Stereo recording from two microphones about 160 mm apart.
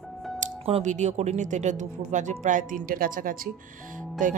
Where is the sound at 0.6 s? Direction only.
45° right (ahead or behind).